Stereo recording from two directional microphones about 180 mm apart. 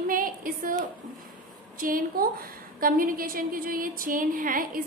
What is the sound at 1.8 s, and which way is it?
A woman's voice, 50° right (ahead or behind).